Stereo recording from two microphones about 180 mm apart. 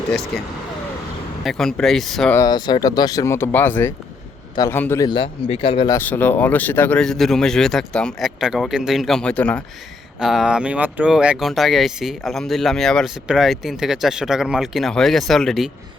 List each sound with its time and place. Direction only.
1.5 s speech: centre (ahead or behind)
2.3 s a man's voice: 20° left (ahead or behind)
5.0 s speech: 25° left (ahead or behind)
6.0 s speech: 10° left (ahead or behind)